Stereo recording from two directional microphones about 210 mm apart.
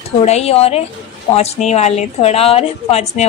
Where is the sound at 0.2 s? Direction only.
30° left (ahead or behind).